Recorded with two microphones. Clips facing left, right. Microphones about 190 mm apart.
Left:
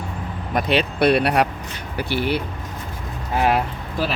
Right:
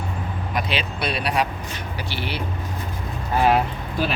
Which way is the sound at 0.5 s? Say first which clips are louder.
Left 7 dB; 60° left (ahead or behind).